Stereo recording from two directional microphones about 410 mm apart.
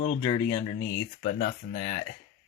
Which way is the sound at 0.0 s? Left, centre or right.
Centre.